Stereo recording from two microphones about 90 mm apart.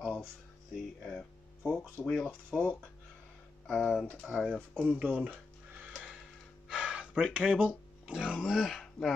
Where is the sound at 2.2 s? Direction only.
15° left (ahead or behind).